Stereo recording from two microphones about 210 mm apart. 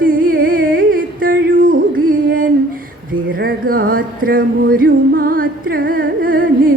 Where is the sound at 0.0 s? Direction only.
40° right (ahead or behind).